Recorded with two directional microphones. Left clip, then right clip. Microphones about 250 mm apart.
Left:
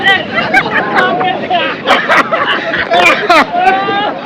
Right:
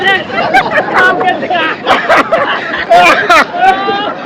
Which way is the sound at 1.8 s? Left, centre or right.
Centre.